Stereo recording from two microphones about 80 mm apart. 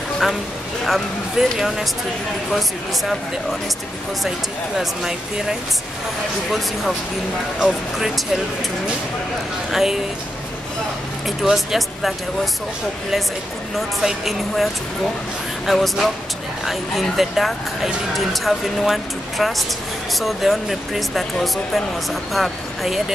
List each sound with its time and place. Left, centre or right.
0.8 s speech: centre
4.7 s speech: centre
7.5 s speech: centre
9.7 s speech: centre
11.2 s speech: centre
13.7 s speech: centre